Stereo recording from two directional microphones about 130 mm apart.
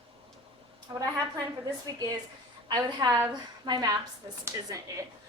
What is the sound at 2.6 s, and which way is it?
A woman's voice, 30° right (ahead or behind).